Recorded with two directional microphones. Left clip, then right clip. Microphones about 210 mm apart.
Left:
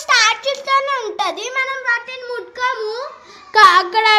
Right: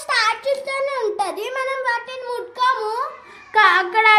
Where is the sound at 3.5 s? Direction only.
25° left (ahead or behind).